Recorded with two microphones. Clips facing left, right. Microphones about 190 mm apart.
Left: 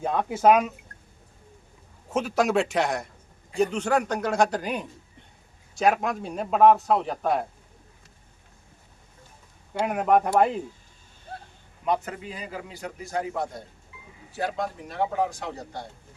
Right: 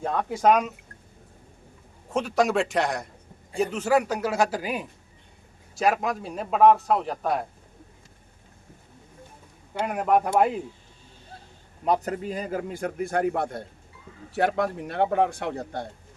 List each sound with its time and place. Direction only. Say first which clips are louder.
0.0 s a man's voice: left 1 dB; 5° left (ahead or behind)
2.1 s a man's voice: even; centre (ahead or behind)
9.7 s a man's voice: left 1 dB; centre (ahead or behind)
11.9 s a man's voice: right 3 dB; 40° right (ahead or behind); by 15.9 s 55° right (ahead or behind)